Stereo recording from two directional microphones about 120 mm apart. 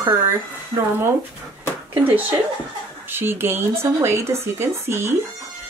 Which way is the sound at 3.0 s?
20° right (ahead or behind).